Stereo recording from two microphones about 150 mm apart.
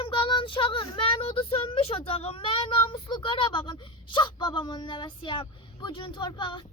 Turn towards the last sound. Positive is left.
turn(degrees=30)  # may be behind; listen again after turning